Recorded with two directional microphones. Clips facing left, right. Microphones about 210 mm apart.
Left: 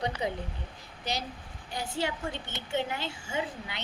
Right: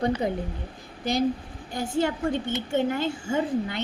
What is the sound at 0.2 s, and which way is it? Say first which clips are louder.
Speech: right 5 dB; 50° right (ahead or behind).